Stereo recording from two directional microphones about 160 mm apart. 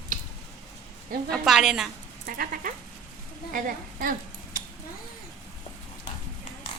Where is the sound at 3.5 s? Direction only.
60° right (ahead or behind).